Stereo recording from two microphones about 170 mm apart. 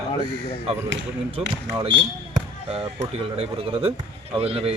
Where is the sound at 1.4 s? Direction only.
35° right (ahead or behind).